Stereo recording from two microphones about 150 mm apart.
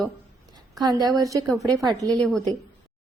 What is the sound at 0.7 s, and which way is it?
Speech, 25° right (ahead or behind).